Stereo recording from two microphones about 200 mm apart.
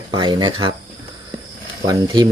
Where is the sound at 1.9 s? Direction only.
20° right (ahead or behind).